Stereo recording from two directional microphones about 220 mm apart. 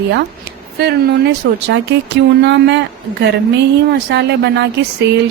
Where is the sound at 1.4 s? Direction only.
55° right (ahead or behind).